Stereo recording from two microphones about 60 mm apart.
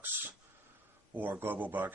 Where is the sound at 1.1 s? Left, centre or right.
Right.